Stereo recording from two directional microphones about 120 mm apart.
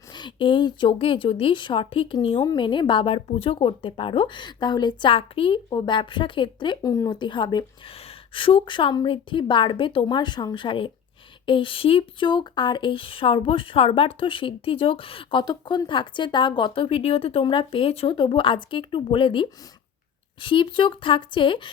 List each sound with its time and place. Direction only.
0.1 s speech: 40° left (ahead or behind)